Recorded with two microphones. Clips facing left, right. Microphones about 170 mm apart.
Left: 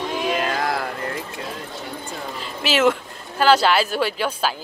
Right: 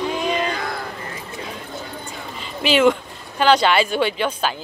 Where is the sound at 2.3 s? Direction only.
Centre (ahead or behind).